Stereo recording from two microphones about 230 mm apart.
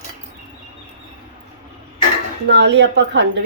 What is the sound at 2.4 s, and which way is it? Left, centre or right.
Speech, right.